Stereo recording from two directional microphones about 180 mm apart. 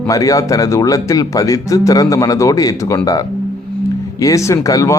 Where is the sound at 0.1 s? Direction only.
20° left (ahead or behind).